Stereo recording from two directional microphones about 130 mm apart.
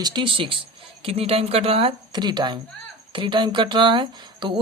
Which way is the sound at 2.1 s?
35° right (ahead or behind).